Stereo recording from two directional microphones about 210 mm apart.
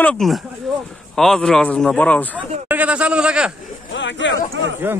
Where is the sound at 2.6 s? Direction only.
5° right (ahead or behind).